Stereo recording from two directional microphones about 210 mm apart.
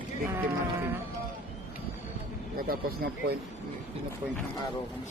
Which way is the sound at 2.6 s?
45° right (ahead or behind).